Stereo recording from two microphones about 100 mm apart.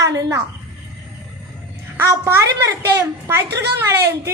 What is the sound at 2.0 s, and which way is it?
A woman's voice, 25° right (ahead or behind).